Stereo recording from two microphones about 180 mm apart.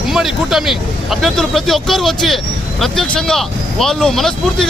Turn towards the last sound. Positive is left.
turn(degrees=0)  # may be behind; listen again after turning